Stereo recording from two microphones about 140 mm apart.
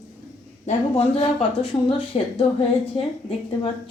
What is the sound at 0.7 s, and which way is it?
A woman's voice, 45° left (ahead or behind).